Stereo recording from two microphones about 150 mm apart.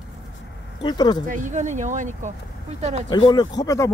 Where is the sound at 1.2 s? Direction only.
60° right (ahead or behind).